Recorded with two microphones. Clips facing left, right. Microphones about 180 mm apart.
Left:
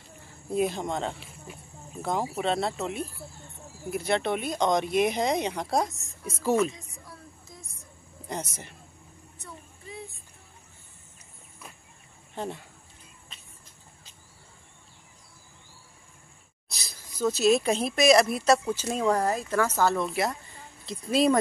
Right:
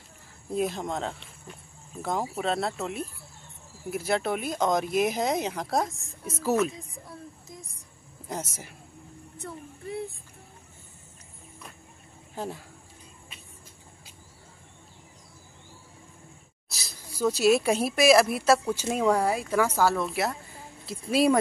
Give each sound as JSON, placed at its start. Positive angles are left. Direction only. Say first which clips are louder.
{"t": 0.5, "sound": "speech", "louder": "left 1 dB", "side_deg": 0}
{"t": 8.3, "sound": "speech", "louder": "even", "side_deg": -5}
{"t": 9.4, "sound": "a sound", "louder": "right 7 dB", "side_deg": -60}
{"t": 12.4, "sound": "speech", "louder": "even", "side_deg": -5}
{"t": 16.6, "sound": "speech", "louder": "right 2 dB", "side_deg": -5}